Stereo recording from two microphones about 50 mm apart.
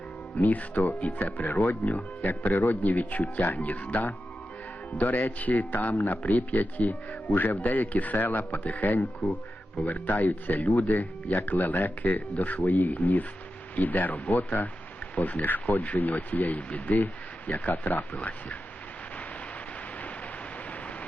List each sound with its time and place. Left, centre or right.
0.3 s speech: left
17.7 s speech: left